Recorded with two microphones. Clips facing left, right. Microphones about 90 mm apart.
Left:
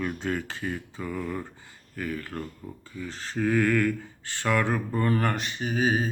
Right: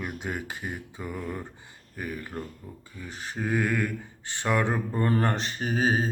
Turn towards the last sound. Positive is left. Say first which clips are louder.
# even
turn(degrees=-35)  # may be behind; listen again after turning